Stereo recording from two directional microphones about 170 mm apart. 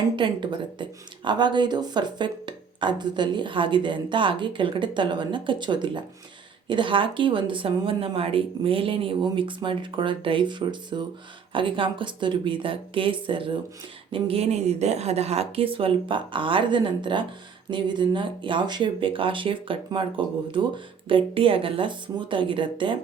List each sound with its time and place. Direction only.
0.2 s a woman's voice: 30° right (ahead or behind)